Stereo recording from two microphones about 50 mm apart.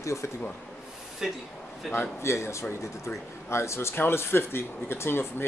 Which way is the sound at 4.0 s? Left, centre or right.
Left.